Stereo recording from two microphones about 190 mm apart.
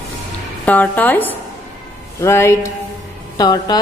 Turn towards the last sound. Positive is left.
turn(degrees=20)  # may be behind; listen again after turning